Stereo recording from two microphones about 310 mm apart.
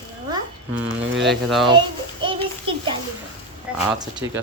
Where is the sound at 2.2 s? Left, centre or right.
Centre.